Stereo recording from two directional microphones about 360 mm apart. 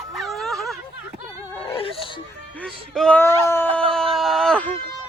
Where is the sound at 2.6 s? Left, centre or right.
Centre.